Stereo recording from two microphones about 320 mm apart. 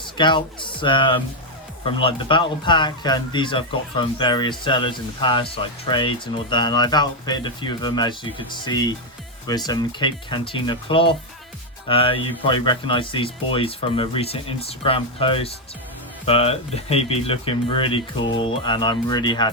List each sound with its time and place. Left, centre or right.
0.0 s speech: centre